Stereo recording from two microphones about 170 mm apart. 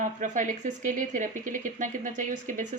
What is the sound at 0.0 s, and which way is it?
Speech, 50° right (ahead or behind).